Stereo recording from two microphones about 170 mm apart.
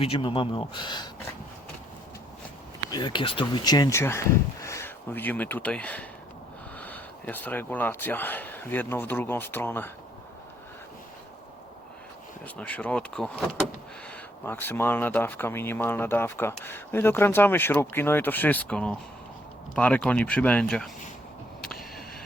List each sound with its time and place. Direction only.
0.0 s speech: 30° left (ahead or behind)
2.9 s speech: 25° left (ahead or behind)
12.5 s speech: 5° left (ahead or behind)
21.6 s a sound: centre (ahead or behind)